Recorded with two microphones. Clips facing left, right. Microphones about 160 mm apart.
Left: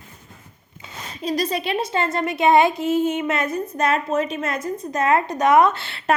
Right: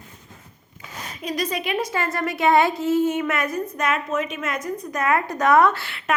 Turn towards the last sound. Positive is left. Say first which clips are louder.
# left 1 dB
turn(degrees=25)  # may be behind; listen again after turning